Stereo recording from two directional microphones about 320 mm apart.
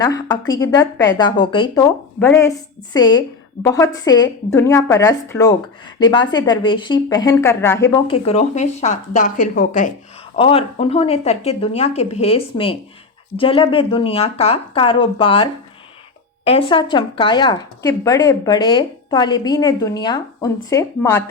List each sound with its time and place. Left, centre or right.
0.0 s speech: centre